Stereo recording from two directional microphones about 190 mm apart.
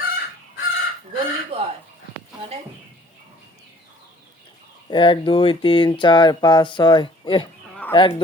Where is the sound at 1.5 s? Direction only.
25° right (ahead or behind).